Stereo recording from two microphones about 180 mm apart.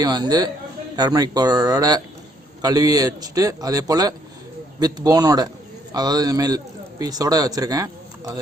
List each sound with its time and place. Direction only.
0.0 s a man's voice: 20° right (ahead or behind)